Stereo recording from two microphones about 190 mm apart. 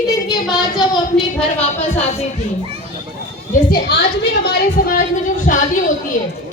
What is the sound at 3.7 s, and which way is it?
A woman's voice, 60° left (ahead or behind).